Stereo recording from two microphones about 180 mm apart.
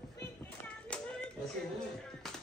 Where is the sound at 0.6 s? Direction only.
5° left (ahead or behind).